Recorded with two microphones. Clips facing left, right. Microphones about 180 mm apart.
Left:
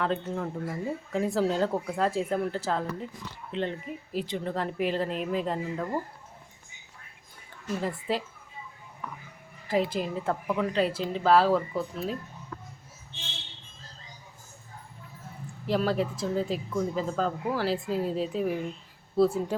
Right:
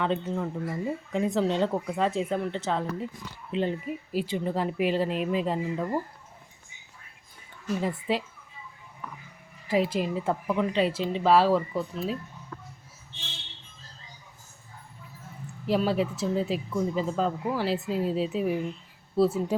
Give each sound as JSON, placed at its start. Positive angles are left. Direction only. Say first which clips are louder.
{"t": 0.0, "sound": "speech", "louder": "right 1 dB", "side_deg": 0}
{"t": 7.8, "sound": "speech", "louder": "right 2 dB", "side_deg": -5}
{"t": 9.6, "sound": "a woman's voice", "louder": "right 2 dB", "side_deg": -5}
{"t": 15.6, "sound": "speech", "louder": "right 1 dB", "side_deg": -5}